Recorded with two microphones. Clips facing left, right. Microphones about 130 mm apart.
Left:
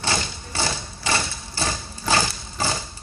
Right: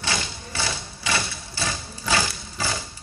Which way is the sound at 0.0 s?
30° left (ahead or behind).